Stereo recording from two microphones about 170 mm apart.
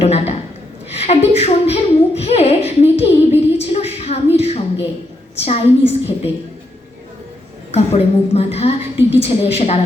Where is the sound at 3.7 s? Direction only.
40° left (ahead or behind).